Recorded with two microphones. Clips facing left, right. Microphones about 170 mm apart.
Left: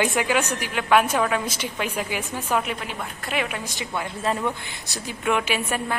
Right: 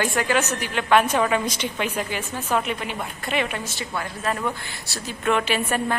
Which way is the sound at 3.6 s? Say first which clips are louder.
Even; 15° left (ahead or behind).